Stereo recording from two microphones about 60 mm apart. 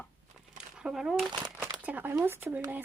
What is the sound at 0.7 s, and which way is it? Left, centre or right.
Speech, centre.